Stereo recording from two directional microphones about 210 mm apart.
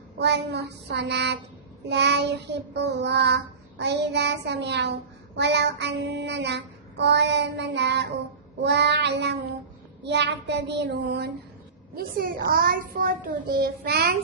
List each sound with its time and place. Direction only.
0.2 s a child's voice: 55° right (ahead or behind)
1.9 s child singing: 55° right (ahead or behind)
10.0 s a child's voice: 55° right (ahead or behind)